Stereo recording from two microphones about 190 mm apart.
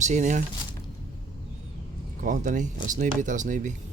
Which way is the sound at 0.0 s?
40° right (ahead or behind).